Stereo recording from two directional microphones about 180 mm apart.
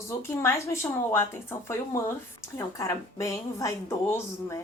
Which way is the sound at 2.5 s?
15° left (ahead or behind).